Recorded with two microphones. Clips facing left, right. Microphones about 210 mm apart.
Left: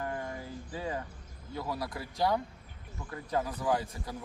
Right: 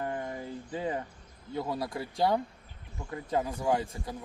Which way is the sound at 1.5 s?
25° right (ahead or behind).